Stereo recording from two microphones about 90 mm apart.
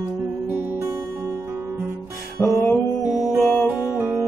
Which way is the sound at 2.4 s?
25° left (ahead or behind).